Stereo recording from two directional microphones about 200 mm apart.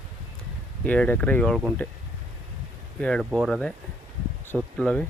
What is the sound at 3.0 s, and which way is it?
Speech, 5° left (ahead or behind).